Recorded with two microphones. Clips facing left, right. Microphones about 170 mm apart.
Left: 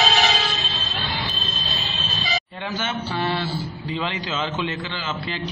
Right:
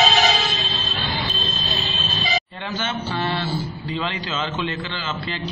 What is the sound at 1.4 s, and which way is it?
Vehicle, 50° right (ahead or behind).